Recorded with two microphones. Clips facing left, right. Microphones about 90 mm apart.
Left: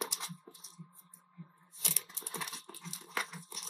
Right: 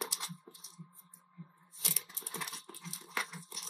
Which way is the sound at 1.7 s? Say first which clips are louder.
Left 1 dB; centre (ahead or behind).